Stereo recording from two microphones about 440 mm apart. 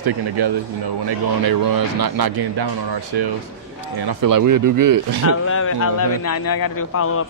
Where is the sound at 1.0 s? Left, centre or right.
Right.